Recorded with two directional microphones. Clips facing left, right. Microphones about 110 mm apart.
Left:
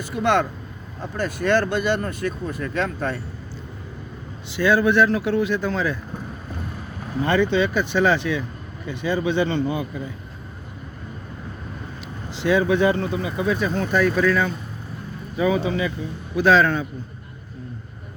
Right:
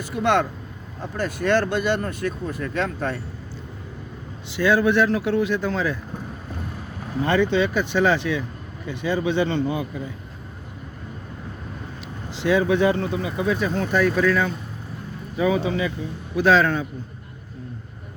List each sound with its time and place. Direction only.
0.0 s speech: 15° right (ahead or behind)
4.4 s speech: 15° right (ahead or behind)
7.3 s speech: 10° right (ahead or behind)
12.4 s a man's voice: 10° right (ahead or behind)